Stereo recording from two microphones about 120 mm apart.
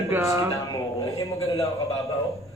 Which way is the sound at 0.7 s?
35° left (ahead or behind).